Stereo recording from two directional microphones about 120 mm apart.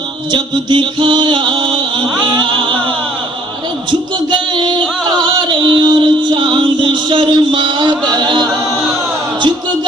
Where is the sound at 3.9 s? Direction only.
40° right (ahead or behind).